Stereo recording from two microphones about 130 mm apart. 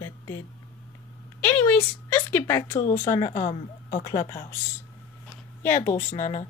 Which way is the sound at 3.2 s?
55° left (ahead or behind).